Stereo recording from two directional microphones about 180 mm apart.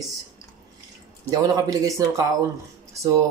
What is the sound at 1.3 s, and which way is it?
Speech, 20° right (ahead or behind).